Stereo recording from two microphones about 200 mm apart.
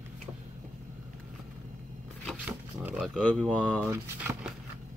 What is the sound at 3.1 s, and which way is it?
Speech, 5° left (ahead or behind).